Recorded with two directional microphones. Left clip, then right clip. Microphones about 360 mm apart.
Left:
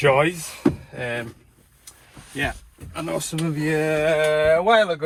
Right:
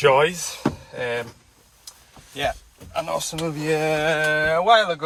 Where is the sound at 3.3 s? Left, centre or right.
Centre.